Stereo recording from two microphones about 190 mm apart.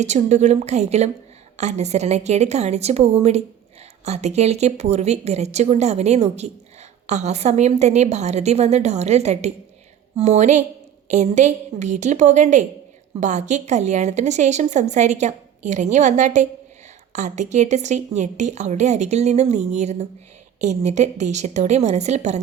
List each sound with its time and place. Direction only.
0.0 s a woman's voice: 35° right (ahead or behind)